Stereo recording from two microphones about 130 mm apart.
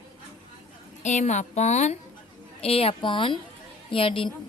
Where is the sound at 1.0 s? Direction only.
65° left (ahead or behind).